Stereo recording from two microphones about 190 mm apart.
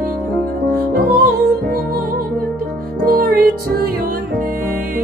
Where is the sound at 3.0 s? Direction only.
50° right (ahead or behind).